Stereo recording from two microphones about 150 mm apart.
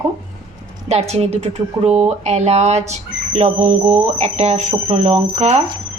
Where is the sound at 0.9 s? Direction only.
45° right (ahead or behind).